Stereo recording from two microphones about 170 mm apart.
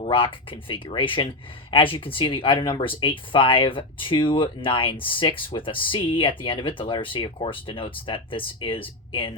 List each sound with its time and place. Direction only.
0.0 s speech: 30° left (ahead or behind)